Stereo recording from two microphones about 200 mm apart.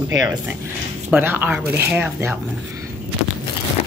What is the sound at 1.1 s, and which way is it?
Speech, 10° right (ahead or behind).